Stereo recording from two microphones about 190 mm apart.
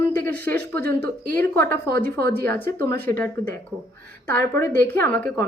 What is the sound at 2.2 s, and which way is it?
Speech, 55° right (ahead or behind).